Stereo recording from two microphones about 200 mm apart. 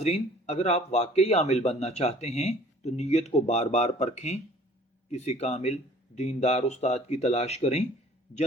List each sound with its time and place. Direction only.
0.0 s speech: 35° left (ahead or behind)